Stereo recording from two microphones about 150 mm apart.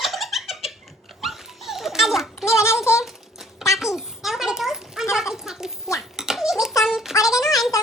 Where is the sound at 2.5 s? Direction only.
20° left (ahead or behind).